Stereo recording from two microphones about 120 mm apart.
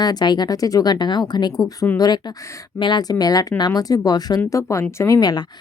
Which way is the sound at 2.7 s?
40° left (ahead or behind).